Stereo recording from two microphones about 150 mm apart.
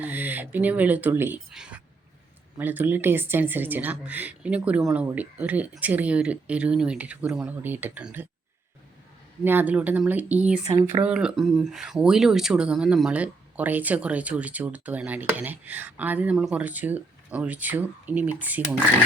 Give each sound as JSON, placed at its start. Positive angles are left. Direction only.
{"t": 0.0, "sound": "speech", "side_deg": -10}
{"t": 9.4, "sound": "speech", "side_deg": -15}
{"t": 10.7, "sound": "speech", "side_deg": -20}
{"t": 11.0, "sound": "speech", "side_deg": -5}